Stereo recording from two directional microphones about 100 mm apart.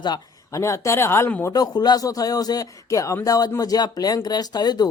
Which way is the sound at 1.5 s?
45° left (ahead or behind).